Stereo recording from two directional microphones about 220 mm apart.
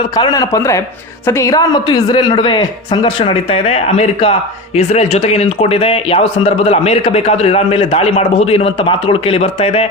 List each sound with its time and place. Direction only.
0.2 s a man's voice: 15° left (ahead or behind)